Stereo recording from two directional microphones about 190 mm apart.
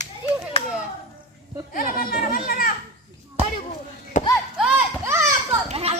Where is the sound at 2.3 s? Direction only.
50° left (ahead or behind).